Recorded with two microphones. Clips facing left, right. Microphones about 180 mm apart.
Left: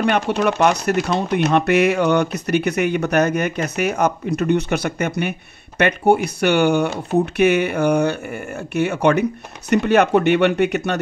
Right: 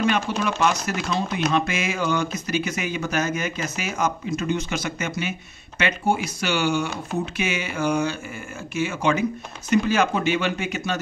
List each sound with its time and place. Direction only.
0.0 s speech: 60° left (ahead or behind)